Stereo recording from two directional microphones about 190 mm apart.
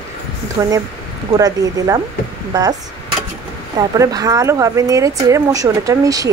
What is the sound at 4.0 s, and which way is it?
Speech, 20° right (ahead or behind).